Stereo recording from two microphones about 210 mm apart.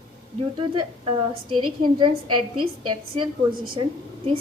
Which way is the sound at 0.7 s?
25° right (ahead or behind).